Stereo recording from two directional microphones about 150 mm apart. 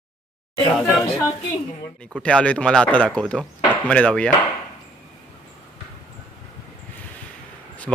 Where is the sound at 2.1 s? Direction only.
10° left (ahead or behind).